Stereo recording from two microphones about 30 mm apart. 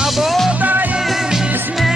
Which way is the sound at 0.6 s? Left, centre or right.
Right.